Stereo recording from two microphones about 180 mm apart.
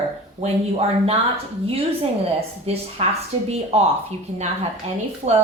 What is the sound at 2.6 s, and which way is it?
Speech, 35° right (ahead or behind).